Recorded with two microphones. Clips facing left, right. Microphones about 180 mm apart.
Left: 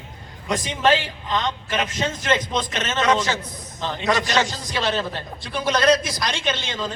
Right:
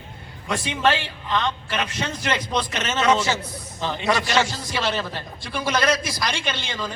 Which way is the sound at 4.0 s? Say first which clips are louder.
Even; 20° left (ahead or behind).